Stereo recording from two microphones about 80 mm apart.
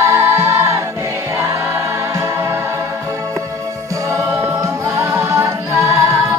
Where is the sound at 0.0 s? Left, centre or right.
Right.